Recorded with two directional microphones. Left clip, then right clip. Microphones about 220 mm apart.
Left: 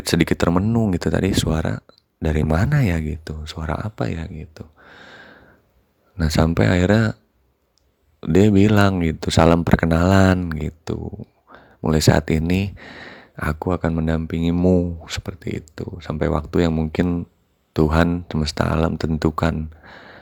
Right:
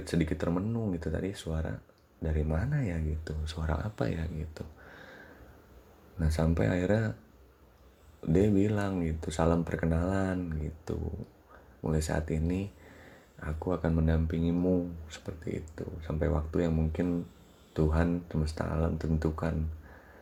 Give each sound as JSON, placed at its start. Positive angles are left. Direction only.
{"t": 0.0, "sound": "speech", "side_deg": 40}
{"t": 6.1, "sound": "speech", "side_deg": 40}
{"t": 8.2, "sound": "speech", "side_deg": 40}